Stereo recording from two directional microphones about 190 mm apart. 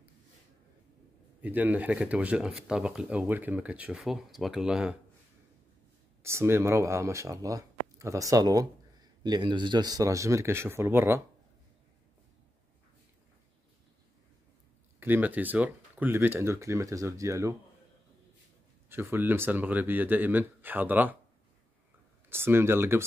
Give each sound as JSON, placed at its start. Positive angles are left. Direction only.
{"t": 1.4, "sound": "speech", "side_deg": -10}
{"t": 6.2, "sound": "speech", "side_deg": -15}
{"t": 15.0, "sound": "speech", "side_deg": -10}
{"t": 18.9, "sound": "speech", "side_deg": -10}
{"t": 22.3, "sound": "speech", "side_deg": -10}